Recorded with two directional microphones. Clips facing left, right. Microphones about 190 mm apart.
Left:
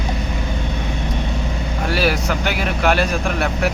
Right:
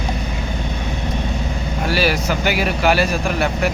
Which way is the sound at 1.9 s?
Centre (ahead or behind).